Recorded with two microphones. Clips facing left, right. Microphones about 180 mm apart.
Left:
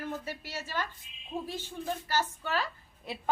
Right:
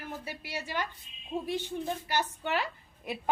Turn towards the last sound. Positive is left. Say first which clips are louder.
# right 3 dB
turn(degrees=-15)  # may be behind; listen again after turning